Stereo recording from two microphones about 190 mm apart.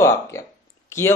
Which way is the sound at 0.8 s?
15° left (ahead or behind).